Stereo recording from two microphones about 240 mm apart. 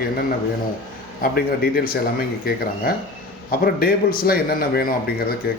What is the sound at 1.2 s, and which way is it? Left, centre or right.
A man's voice, left.